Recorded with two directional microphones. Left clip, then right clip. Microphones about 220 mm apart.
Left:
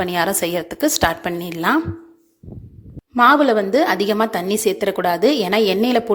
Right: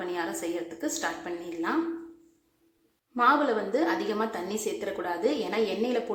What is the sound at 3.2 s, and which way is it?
A woman's voice, 45° left (ahead or behind).